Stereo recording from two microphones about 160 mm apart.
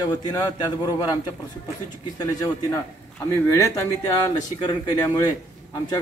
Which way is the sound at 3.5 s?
20° left (ahead or behind).